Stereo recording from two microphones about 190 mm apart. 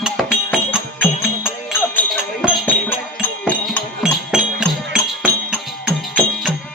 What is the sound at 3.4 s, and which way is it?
Music, 5° right (ahead or behind).